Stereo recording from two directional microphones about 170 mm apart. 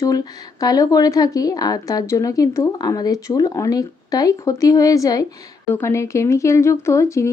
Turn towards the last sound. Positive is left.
turn(degrees=15)  # may be behind; listen again after turning